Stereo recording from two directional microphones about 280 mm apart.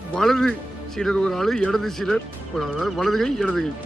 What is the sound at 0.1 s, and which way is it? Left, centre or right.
Speech, centre.